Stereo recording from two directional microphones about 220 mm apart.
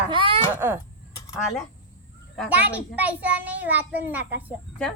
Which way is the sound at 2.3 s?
Centre (ahead or behind).